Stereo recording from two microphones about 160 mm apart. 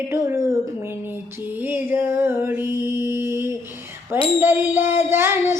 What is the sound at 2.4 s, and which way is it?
Mantra, 15° right (ahead or behind).